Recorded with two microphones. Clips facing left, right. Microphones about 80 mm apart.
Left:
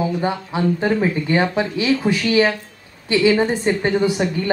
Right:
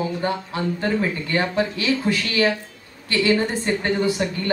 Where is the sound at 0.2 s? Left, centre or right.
Centre.